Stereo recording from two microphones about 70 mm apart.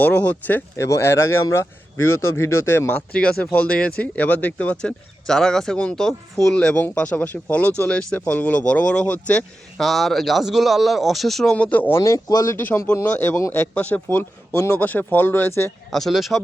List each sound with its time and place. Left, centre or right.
0.0 s speech: left
0.8 s speech: left
2.9 s speech: centre
9.7 s speech: centre
11.5 s speech: left
12.0 s speech: left
13.1 s speech: left
14.5 s speech: left
14.8 s speech: left
15.9 s speech: centre